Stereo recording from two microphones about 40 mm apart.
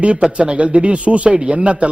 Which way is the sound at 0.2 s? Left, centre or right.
Right.